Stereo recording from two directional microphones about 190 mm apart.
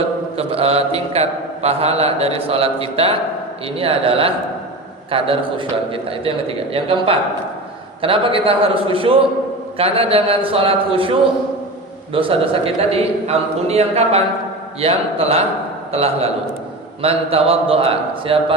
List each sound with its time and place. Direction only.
0.3 s a man's voice: 30° right (ahead or behind)
12.1 s a man's voice: 30° right (ahead or behind)